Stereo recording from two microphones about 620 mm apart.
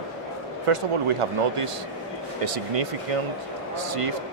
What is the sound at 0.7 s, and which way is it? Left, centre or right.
Speech, right.